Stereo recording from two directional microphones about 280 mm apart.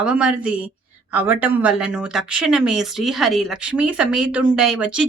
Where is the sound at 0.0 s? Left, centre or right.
Centre.